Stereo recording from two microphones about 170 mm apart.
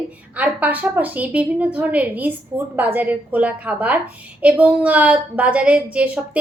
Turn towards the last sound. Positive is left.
turn(degrees=-10)  # may be behind; listen again after turning